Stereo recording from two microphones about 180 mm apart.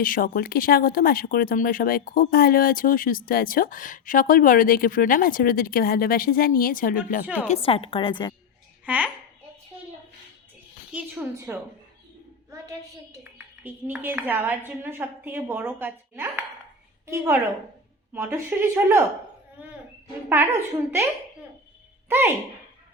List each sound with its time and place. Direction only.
0.0 s speech: 50° left (ahead or behind)
7.4 s a woman's voice: 35° left (ahead or behind)
8.9 s a woman's voice: 10° right (ahead or behind)
10.9 s a woman's voice: 10° right (ahead or behind)
13.7 s a woman's voice: 10° right (ahead or behind)
18.1 s a woman's voice: 10° right (ahead or behind)
20.3 s a woman's voice: 15° right (ahead or behind)